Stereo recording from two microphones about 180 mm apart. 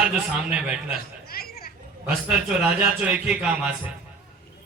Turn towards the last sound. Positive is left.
turn(degrees=-5)  # may be behind; listen again after turning